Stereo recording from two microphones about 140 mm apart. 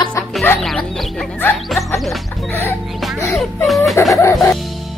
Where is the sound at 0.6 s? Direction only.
Centre (ahead or behind).